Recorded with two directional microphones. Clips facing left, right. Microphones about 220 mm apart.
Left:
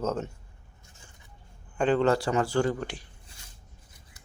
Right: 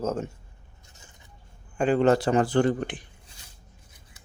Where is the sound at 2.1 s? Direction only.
20° right (ahead or behind).